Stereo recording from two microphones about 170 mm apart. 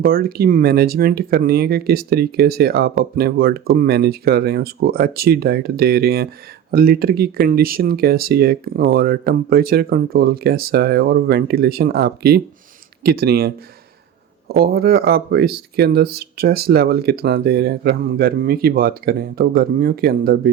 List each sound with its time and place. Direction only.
0.0 s speech: 60° right (ahead or behind)